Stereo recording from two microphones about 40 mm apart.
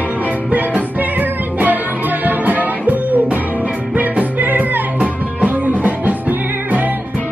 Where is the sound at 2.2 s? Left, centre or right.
Right.